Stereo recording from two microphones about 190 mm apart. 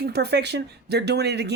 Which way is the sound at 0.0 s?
60° right (ahead or behind).